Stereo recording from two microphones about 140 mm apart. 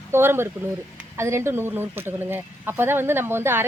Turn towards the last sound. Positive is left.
turn(degrees=-15)  # may be behind; listen again after turning